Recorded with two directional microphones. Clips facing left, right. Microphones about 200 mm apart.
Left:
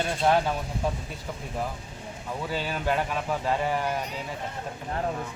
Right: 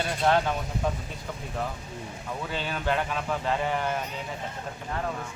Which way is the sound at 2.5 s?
10° left (ahead or behind).